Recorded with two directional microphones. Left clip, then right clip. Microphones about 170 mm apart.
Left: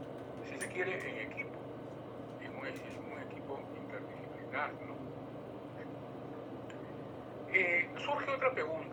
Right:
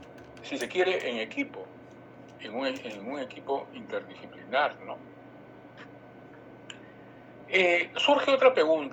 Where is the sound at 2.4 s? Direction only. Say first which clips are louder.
Right 13 dB; 60° right (ahead or behind).